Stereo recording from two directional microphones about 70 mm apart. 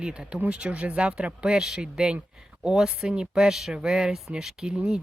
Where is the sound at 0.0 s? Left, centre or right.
Centre.